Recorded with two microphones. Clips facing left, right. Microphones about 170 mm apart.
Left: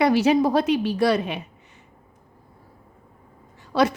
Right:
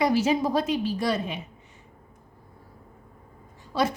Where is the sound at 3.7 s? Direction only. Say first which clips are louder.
Left 5 dB; 70° left (ahead or behind).